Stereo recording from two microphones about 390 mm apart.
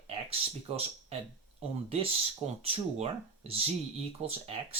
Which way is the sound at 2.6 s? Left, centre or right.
Centre.